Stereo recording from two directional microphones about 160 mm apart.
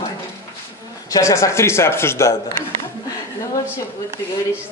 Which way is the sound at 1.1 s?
20° left (ahead or behind).